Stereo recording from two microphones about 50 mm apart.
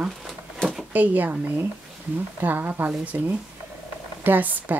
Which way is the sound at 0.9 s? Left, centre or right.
Right.